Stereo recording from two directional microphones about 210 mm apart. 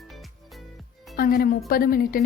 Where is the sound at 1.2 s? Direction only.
45° left (ahead or behind).